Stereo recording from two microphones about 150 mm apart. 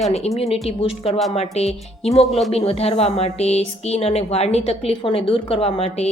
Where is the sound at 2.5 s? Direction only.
40° left (ahead or behind).